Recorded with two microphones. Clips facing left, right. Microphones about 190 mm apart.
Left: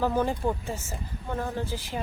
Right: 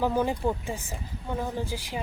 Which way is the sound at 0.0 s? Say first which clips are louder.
Even; 10° right (ahead or behind).